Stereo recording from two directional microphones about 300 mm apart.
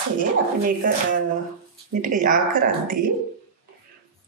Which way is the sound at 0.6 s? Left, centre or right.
Right.